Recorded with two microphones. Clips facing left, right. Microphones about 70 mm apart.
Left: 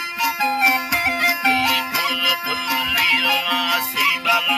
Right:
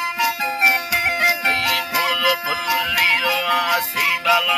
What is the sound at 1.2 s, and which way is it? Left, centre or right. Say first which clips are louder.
Music: left 2 dB; right.